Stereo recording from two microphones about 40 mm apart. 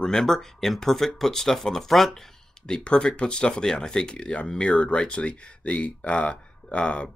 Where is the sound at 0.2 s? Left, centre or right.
Centre.